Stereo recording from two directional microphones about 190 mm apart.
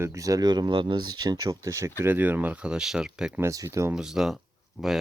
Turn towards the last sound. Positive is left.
turn(degrees=-5)  # may be behind; listen again after turning